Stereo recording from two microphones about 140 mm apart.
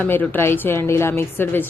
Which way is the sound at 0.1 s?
15° left (ahead or behind).